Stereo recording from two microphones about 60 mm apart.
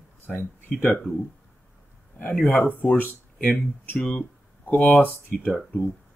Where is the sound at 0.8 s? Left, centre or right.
Left.